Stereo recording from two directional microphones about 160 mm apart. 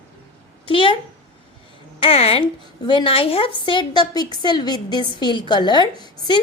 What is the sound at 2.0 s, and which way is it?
A woman's voice, 35° left (ahead or behind).